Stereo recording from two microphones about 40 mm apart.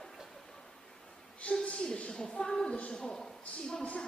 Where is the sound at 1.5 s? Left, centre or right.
Left.